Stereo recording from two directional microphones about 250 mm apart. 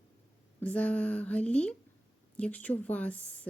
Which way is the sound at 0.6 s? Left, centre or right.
Centre.